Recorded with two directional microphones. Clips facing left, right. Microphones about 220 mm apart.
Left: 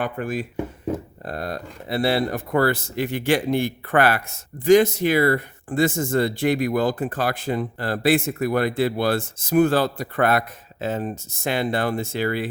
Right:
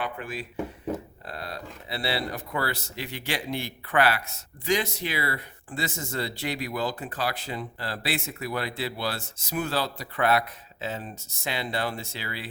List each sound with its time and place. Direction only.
0.0 s a man's voice: 45° left (ahead or behind)